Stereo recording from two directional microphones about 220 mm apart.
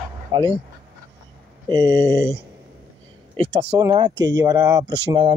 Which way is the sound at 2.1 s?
10° left (ahead or behind).